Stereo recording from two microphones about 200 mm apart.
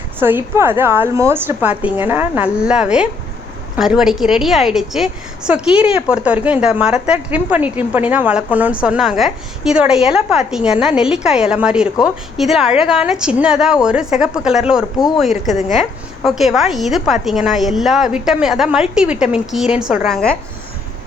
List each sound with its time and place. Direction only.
0.2 s a woman's voice: 10° right (ahead or behind)